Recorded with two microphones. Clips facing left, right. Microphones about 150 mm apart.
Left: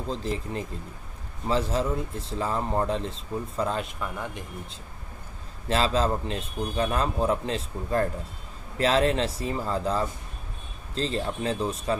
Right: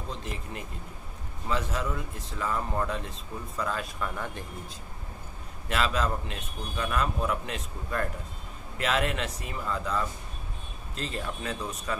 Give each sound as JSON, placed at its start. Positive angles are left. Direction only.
{"t": 0.1, "sound": "a man's voice", "side_deg": 30}
{"t": 4.0, "sound": "speech", "side_deg": 15}
{"t": 5.7, "sound": "a man's voice", "side_deg": 30}